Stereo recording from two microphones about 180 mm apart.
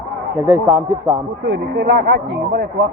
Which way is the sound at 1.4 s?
75° right (ahead or behind).